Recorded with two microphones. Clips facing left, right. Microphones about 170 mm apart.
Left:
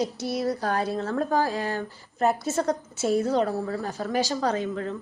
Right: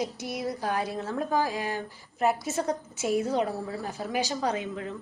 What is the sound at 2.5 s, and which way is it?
Speech, 40° left (ahead or behind).